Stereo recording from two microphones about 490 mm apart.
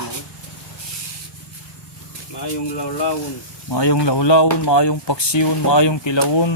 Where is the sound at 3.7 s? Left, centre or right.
Left.